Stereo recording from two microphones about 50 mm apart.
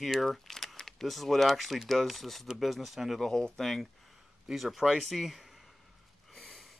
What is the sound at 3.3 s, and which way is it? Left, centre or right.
Speech, centre.